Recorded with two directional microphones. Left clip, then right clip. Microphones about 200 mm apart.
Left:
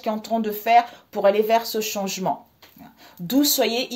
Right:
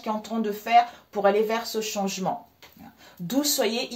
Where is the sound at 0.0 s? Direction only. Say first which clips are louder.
Left 4 dB; 50° left (ahead or behind).